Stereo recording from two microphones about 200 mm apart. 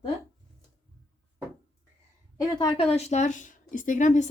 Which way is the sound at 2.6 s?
25° left (ahead or behind).